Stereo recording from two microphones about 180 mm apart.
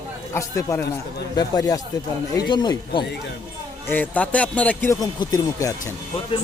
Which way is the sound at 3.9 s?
10° left (ahead or behind).